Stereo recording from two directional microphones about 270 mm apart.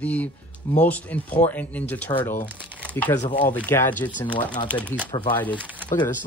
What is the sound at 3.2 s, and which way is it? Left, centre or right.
Speech, left.